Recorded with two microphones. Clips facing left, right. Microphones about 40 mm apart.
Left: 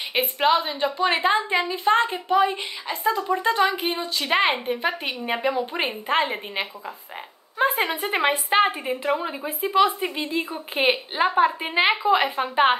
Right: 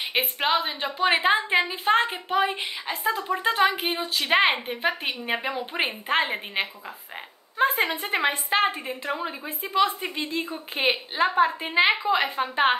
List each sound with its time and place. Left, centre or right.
0.1 s a woman's voice: centre
3.3 s a woman's voice: centre
7.5 s a woman's voice: centre